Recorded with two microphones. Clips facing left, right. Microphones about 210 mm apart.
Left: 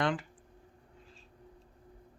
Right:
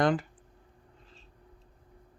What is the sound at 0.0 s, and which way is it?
Speech, 40° right (ahead or behind).